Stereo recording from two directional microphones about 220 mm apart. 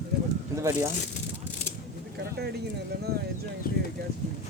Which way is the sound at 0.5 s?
15° right (ahead or behind).